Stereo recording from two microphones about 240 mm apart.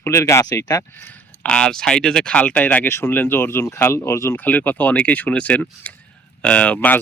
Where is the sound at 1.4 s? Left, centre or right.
Centre.